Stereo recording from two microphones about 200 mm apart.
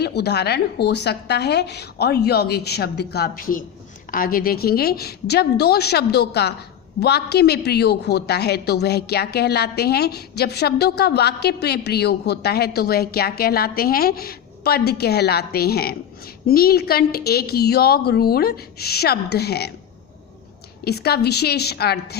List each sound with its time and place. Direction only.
0.0 s a woman's voice: 55° left (ahead or behind)
20.8 s a woman's voice: 55° left (ahead or behind)